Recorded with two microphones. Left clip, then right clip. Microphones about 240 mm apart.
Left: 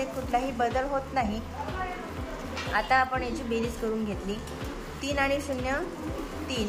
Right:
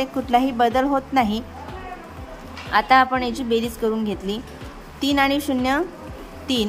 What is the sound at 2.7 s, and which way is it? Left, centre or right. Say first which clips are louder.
A woman's voice: right 9 dB; right.